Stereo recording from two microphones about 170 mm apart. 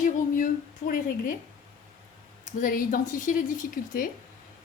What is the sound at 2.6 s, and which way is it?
A woman's voice, 55° left (ahead or behind).